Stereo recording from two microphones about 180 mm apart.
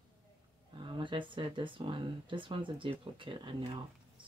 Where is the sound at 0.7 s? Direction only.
25° right (ahead or behind).